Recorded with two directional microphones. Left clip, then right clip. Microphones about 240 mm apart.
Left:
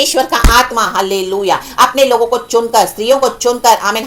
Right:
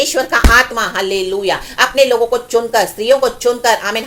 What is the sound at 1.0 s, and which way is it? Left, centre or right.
Speech, left.